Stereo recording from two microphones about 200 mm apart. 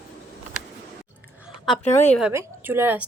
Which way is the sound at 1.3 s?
5° right (ahead or behind).